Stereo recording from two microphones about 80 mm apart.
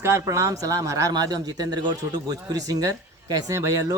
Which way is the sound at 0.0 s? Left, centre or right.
Right.